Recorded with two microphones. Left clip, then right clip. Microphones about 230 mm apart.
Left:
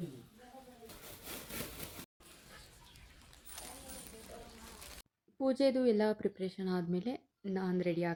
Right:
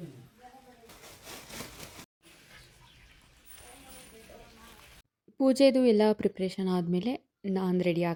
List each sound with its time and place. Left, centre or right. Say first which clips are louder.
1.2 s wood: right 2 dB; centre
5.4 s speech: right 8 dB; right